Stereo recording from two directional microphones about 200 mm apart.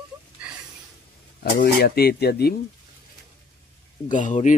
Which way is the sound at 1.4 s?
50° left (ahead or behind).